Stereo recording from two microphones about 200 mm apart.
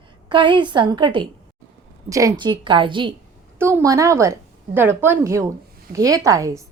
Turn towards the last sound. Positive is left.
turn(degrees=-15)  # may be behind; listen again after turning